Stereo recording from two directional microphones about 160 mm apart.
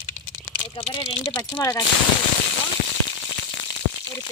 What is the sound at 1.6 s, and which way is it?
Speech, 15° left (ahead or behind).